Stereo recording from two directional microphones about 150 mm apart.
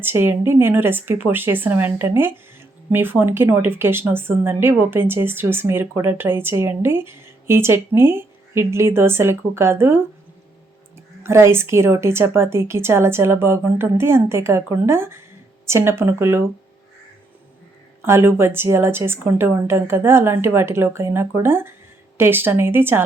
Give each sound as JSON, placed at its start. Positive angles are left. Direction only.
{"t": 0.0, "sound": "a woman's voice", "side_deg": -15}
{"t": 18.0, "sound": "a woman's voice", "side_deg": -15}